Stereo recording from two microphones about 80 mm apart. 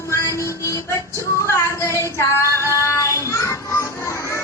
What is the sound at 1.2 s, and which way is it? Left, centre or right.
Female singing, left.